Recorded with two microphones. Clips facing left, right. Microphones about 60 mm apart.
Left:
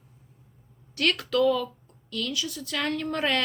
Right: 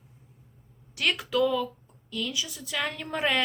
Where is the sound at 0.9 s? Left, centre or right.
Centre.